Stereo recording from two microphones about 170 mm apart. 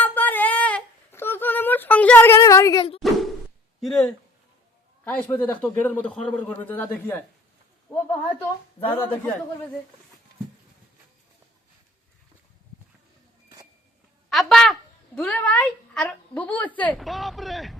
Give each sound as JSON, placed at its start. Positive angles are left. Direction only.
{"t": 0.0, "sound": "a sound", "side_deg": 10}
{"t": 3.0, "sound": "plop", "side_deg": 0}
{"t": 3.8, "sound": "a man's voice", "side_deg": 0}
{"t": 7.9, "sound": "speech", "side_deg": 20}
{"t": 8.8, "sound": "a man's voice", "side_deg": 10}
{"t": 14.3, "sound": "a woman's voice", "side_deg": 0}